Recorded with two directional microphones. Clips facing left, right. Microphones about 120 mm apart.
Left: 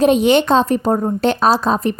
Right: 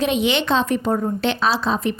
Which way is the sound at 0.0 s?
45° left (ahead or behind).